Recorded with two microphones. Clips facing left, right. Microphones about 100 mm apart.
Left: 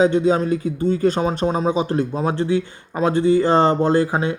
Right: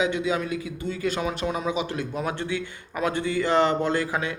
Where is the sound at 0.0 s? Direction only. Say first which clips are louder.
Left 9 dB; 40° left (ahead or behind).